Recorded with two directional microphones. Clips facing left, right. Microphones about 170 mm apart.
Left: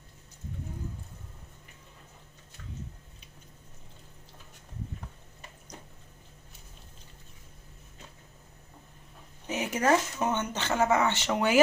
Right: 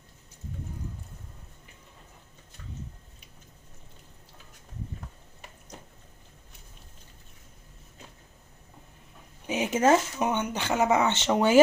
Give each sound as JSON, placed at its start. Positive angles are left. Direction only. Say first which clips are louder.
{"t": 9.5, "sound": "speech", "louder": "right 4 dB", "side_deg": -20}